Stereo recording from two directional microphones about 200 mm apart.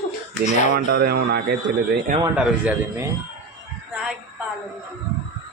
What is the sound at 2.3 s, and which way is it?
Speech, 5° right (ahead or behind).